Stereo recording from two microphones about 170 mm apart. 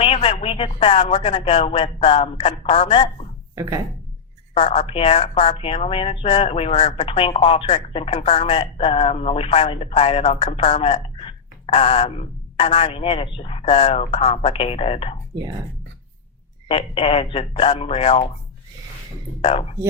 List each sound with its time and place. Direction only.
0.0 s a woman's voice: 35° left (ahead or behind)
3.5 s speech: 20° right (ahead or behind)
4.5 s a woman's voice: 35° left (ahead or behind)
16.6 s a woman's voice: 35° left (ahead or behind)
19.4 s a woman's voice: 35° left (ahead or behind)